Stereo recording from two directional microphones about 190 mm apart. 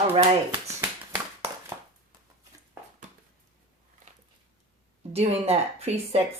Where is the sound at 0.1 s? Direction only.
25° right (ahead or behind).